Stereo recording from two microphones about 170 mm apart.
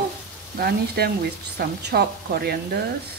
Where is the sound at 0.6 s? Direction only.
70° right (ahead or behind).